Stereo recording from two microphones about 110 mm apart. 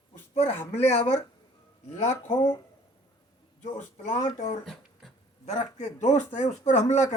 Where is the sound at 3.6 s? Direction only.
90° left.